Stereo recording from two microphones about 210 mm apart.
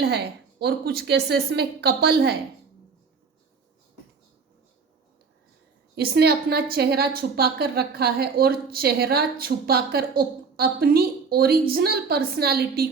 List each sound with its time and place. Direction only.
0.0 s a woman's voice: 50° right (ahead or behind)
6.0 s a woman's voice: 50° right (ahead or behind)